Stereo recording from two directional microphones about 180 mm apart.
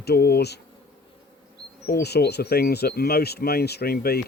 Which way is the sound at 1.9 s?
60° left (ahead or behind).